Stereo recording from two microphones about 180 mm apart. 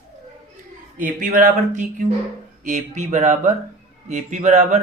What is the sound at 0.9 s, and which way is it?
Speech, 45° right (ahead or behind).